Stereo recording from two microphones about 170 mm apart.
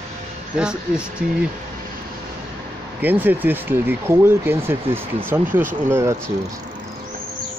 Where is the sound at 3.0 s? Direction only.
10° right (ahead or behind).